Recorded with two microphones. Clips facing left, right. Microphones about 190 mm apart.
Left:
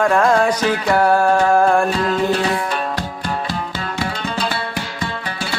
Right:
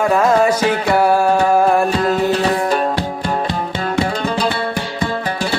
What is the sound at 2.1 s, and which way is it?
Music, 40° right (ahead or behind).